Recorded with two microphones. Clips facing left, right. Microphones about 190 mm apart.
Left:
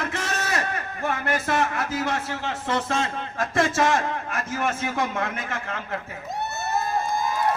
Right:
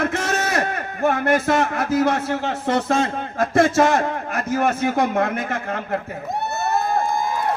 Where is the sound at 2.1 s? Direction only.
55° right (ahead or behind).